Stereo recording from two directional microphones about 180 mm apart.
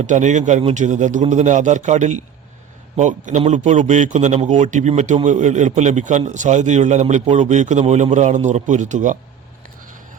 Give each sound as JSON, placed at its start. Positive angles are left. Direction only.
{"t": 0.0, "sound": "a man's voice", "side_deg": -40}